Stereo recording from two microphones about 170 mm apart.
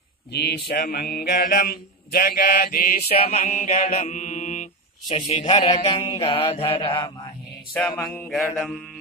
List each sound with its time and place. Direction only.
0.3 s speech: 70° left (ahead or behind)
0.7 s mantra: 65° left (ahead or behind)
3.1 s mantra: 40° left (ahead or behind)
5.0 s mantra: 35° left (ahead or behind)
7.7 s a sound: 10° left (ahead or behind)